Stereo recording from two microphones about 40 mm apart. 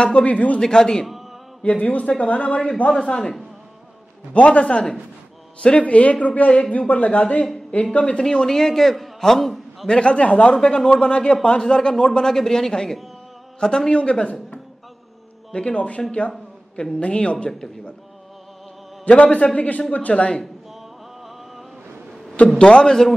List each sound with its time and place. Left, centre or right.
0.0 s speech: left
0.6 s speech: centre
1.7 s speech: left; by 3.3 s centre
4.3 s a man's voice: left; by 9.8 s centre
9.8 s speech: left
10.5 s speech: left
11.6 s speech: centre
15.5 s speech: left
16.2 s a sound: left
17.0 s speech: left
17.6 s speech: centre
19.0 s speech: left
22.6 s speech: left